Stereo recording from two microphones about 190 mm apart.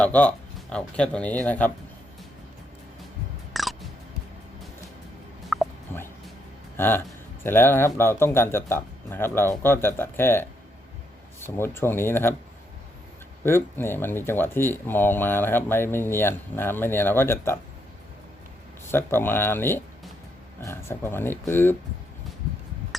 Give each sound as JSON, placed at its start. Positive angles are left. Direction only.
{"t": 0.0, "sound": "speech", "side_deg": 5}
{"t": 3.5, "sound": "a sound", "side_deg": 0}
{"t": 5.5, "sound": "a sound", "side_deg": 0}
{"t": 5.9, "sound": "music", "side_deg": 10}
{"t": 6.7, "sound": "speech", "side_deg": 10}
{"t": 13.4, "sound": "speech", "side_deg": 10}
{"t": 18.9, "sound": "speech", "side_deg": 10}